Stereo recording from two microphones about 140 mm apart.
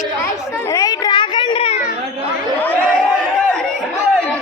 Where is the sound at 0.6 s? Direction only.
25° left (ahead or behind).